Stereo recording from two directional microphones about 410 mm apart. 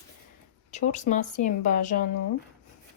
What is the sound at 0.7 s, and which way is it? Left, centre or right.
Speech, centre.